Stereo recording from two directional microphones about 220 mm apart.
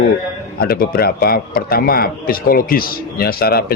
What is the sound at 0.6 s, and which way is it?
A man's voice, 45° left (ahead or behind).